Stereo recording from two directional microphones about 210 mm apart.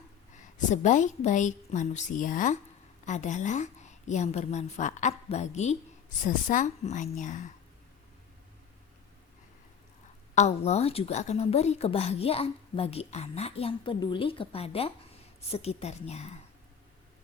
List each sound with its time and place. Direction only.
0.7 s a woman's voice: 35° left (ahead or behind)
10.3 s a woman's voice: 30° left (ahead or behind)